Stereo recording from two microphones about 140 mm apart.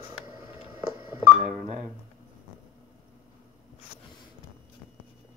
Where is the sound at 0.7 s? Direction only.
30° right (ahead or behind).